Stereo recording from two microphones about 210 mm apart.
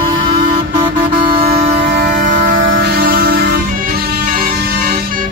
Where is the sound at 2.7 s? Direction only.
50° right (ahead or behind).